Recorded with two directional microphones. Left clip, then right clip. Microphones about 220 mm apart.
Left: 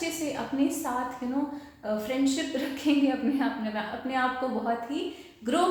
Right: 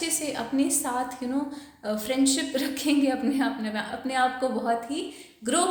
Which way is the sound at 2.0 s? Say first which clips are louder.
Right 5 dB; 45° right (ahead or behind).